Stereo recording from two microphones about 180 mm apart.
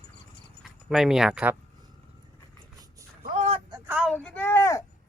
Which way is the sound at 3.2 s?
40° right (ahead or behind).